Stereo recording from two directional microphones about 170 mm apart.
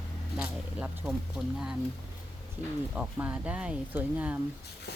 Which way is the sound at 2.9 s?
5° right (ahead or behind).